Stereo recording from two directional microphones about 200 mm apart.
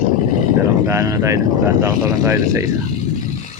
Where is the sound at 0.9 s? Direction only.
15° right (ahead or behind).